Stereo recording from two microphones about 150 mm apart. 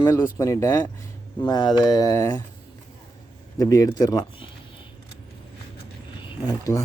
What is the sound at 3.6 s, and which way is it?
Speech, 20° left (ahead or behind).